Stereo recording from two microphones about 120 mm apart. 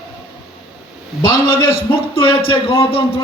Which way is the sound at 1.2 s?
40° left (ahead or behind).